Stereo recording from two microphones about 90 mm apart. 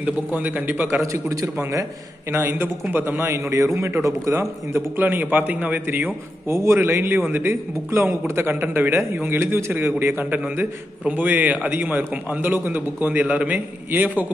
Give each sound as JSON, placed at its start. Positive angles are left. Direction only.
{"t": 0.0, "sound": "a man's voice", "side_deg": -20}
{"t": 1.0, "sound": "a man's voice", "side_deg": -35}
{"t": 2.3, "sound": "a man's voice", "side_deg": -25}